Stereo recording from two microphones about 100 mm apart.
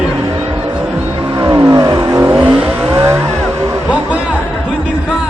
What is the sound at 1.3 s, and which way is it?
Vehicle, 45° right (ahead or behind).